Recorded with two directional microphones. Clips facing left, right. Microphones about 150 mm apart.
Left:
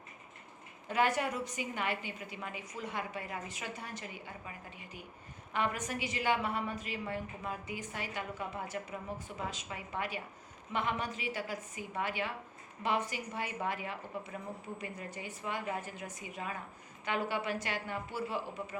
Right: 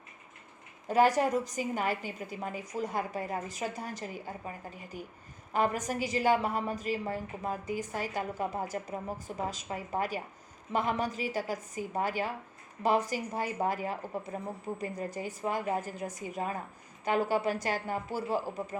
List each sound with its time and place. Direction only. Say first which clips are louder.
0.9 s a woman's voice: right 6 dB; 40° right (ahead or behind)